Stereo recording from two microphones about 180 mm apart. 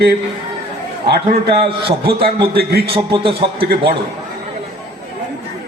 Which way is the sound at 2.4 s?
60° right (ahead or behind).